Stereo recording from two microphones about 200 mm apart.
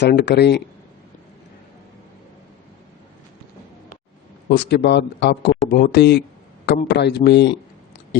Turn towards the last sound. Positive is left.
turn(degrees=55)  # may be behind; listen again after turning